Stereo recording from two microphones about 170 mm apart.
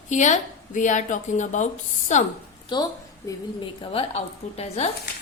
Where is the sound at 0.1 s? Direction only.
45° left (ahead or behind).